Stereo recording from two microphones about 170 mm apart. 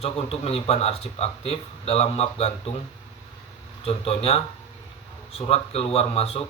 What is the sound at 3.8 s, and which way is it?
A man's voice, 35° left (ahead or behind).